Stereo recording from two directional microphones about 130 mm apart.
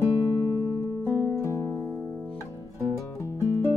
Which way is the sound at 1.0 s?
20° left (ahead or behind).